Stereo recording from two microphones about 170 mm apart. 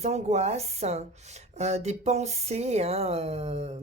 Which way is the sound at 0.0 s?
40° right (ahead or behind).